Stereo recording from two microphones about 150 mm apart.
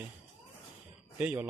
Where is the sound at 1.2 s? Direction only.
10° right (ahead or behind).